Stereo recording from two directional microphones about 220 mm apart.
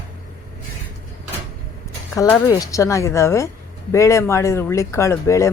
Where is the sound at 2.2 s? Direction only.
15° left (ahead or behind).